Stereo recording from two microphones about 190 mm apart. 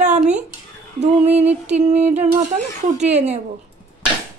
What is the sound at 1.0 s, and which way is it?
Speech, 35° right (ahead or behind).